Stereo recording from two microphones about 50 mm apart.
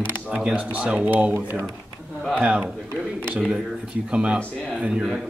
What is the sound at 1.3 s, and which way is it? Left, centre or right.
Speech, right.